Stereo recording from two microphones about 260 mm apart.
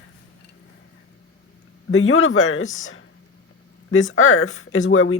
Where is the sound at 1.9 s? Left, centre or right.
Left.